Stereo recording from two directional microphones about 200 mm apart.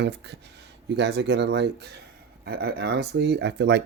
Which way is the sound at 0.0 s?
60° right (ahead or behind).